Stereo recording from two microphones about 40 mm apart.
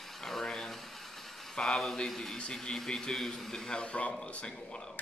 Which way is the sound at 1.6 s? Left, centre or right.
Centre.